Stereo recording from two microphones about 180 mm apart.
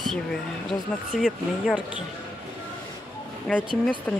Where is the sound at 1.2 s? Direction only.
5° right (ahead or behind).